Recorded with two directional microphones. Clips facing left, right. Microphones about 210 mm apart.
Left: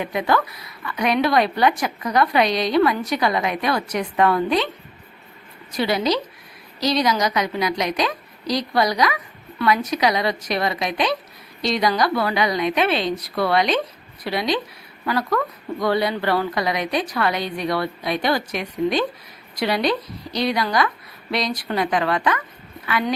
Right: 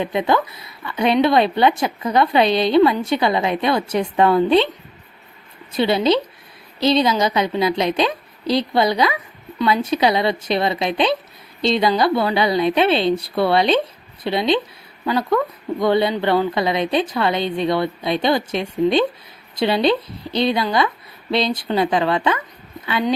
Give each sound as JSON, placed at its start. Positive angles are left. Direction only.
{"t": 0.0, "sound": "a woman's voice", "side_deg": -25}
{"t": 5.7, "sound": "a woman's voice", "side_deg": -25}